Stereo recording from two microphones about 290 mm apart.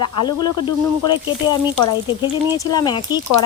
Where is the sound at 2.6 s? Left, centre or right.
Centre.